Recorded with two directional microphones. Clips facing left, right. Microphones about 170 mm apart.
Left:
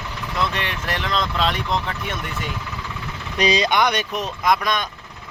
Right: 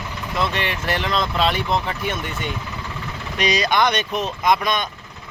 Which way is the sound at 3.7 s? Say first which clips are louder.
Right 1 dB; 10° left (ahead or behind).